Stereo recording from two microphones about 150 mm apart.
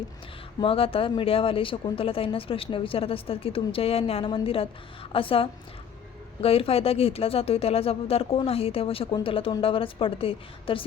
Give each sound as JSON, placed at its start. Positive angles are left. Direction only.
{"t": 0.6, "sound": "speech", "side_deg": 40}